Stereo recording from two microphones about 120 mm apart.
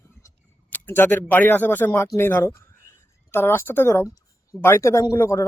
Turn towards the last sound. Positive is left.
turn(degrees=20)  # may be behind; listen again after turning